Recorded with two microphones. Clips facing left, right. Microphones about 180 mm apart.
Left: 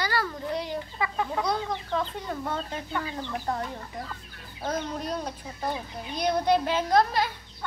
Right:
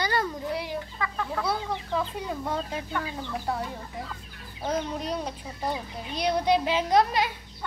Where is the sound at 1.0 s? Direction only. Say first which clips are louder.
Left 4 dB; 15° left (ahead or behind).